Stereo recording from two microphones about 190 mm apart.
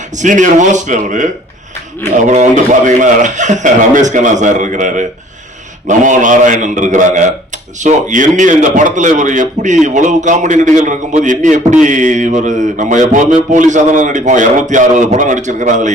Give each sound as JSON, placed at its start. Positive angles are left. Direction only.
{"t": 0.2, "sound": "a man's voice", "side_deg": -40}